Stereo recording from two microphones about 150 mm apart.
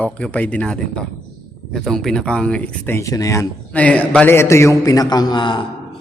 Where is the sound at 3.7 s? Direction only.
10° left (ahead or behind); by 5.6 s 30° left (ahead or behind).